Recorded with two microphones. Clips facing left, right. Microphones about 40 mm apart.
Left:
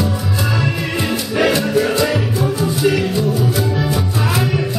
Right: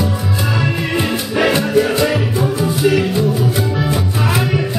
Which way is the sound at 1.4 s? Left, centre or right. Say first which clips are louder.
Right 1 dB; centre.